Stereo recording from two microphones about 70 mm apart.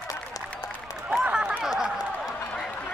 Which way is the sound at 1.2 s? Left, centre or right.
Right.